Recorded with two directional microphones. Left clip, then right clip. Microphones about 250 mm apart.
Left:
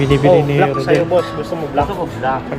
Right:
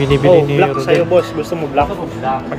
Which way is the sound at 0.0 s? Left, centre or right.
Centre.